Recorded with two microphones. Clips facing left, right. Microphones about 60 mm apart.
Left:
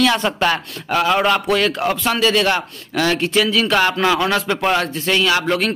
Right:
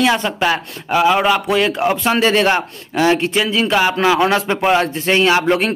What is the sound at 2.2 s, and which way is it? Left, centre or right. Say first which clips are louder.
A man's voice: right 2 dB; right.